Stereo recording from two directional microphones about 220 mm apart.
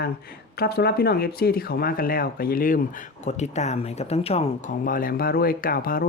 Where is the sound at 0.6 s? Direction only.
45° left (ahead or behind).